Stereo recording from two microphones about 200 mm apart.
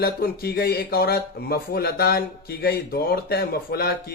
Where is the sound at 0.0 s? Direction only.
50° left (ahead or behind).